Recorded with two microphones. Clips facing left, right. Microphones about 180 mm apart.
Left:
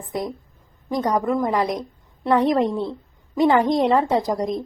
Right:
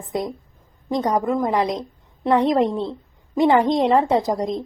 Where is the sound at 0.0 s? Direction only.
20° right (ahead or behind).